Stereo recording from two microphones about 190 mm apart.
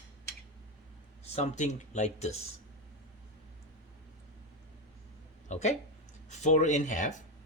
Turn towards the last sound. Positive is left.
turn(degrees=40)  # may be behind; listen again after turning